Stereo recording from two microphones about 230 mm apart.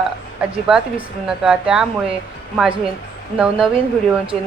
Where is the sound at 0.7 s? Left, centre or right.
Centre.